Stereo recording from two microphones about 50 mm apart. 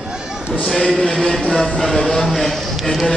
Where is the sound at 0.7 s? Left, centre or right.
Centre.